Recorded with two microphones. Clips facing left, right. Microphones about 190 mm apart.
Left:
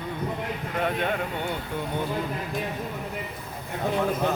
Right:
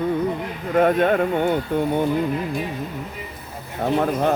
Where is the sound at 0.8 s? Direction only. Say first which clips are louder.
Right 10 dB; 45° right (ahead or behind).